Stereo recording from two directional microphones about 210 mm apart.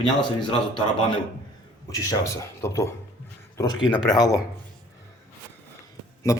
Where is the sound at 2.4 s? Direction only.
15° left (ahead or behind).